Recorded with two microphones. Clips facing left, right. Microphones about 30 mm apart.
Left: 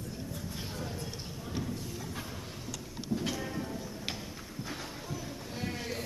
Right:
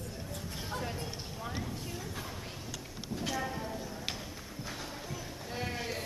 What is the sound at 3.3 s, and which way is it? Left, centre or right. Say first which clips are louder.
Train: right 1 dB; centre.